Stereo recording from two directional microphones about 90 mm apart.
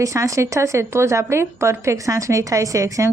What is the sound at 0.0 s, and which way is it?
Speech, 35° right (ahead or behind).